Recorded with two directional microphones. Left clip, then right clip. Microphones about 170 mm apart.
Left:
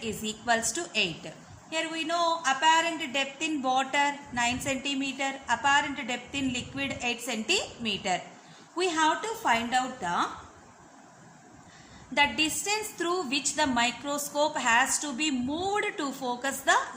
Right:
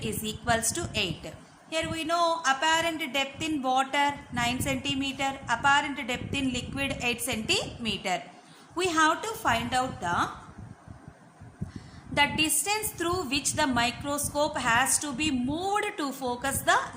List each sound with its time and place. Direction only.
0.0 s a woman's voice: 15° right (ahead or behind)
12.1 s a woman's voice: 10° right (ahead or behind)